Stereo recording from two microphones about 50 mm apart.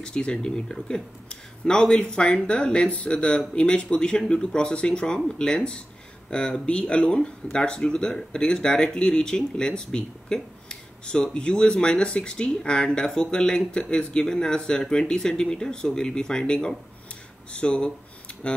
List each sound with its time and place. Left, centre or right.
0.0 s speech: centre